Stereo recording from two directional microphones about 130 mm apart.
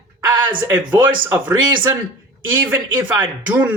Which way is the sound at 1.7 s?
35° right (ahead or behind).